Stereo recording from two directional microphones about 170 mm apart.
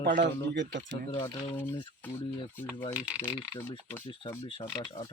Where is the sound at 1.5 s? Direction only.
10° left (ahead or behind).